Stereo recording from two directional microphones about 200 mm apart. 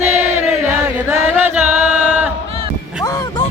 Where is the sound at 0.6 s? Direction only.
10° right (ahead or behind).